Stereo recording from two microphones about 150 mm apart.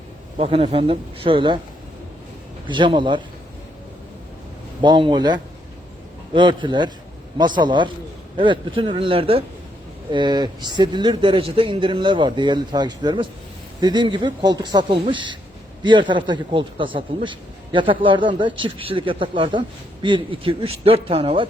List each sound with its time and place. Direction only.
0.3 s a man's voice: 40° right (ahead or behind)
2.6 s a man's voice: 35° right (ahead or behind)
4.8 s a man's voice: 30° right (ahead or behind)